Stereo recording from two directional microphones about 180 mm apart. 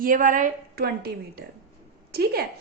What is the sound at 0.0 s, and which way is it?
A woman's voice, 45° right (ahead or behind).